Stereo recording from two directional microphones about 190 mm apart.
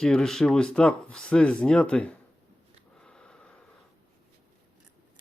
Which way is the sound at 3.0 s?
5° left (ahead or behind).